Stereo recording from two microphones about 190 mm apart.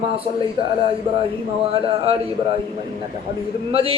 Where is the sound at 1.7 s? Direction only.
30° right (ahead or behind).